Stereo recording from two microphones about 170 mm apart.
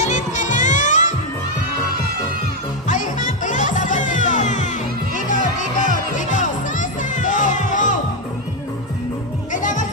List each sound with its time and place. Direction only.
0.0 s music: 45° left (ahead or behind)
2.9 s music: 50° left (ahead or behind)
9.5 s music: 50° left (ahead or behind)